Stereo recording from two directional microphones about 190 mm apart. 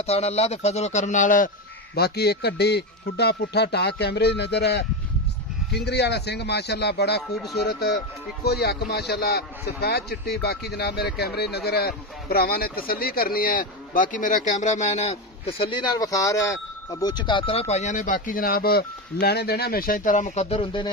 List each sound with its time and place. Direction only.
0.0 s speech: 35° left (ahead or behind)
2.0 s a man's voice: 60° left (ahead or behind); by 20.9 s 25° left (ahead or behind)